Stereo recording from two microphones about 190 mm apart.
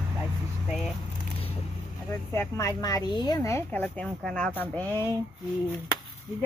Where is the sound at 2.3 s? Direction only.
15° left (ahead or behind).